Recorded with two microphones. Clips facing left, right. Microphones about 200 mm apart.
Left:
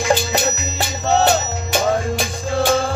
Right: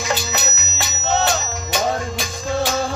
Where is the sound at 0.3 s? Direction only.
30° left (ahead or behind).